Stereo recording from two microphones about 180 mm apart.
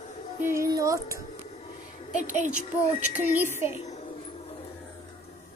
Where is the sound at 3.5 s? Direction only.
15° right (ahead or behind).